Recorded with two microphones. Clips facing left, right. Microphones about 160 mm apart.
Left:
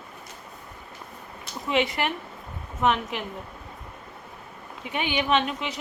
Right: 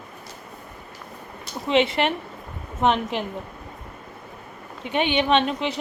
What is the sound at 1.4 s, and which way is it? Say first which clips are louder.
A woman's voice: right 4 dB; 25° right (ahead or behind).